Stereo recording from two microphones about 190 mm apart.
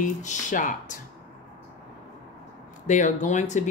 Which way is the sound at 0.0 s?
40° left (ahead or behind).